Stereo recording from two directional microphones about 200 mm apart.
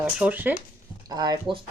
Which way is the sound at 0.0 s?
5° right (ahead or behind).